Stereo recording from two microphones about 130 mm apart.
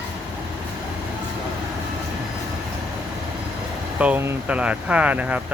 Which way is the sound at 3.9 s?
10° right (ahead or behind).